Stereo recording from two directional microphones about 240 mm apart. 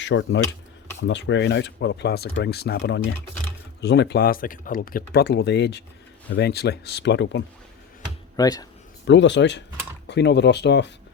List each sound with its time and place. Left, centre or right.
0.0 s speech: left
8.4 s speech: centre
9.0 s speech: left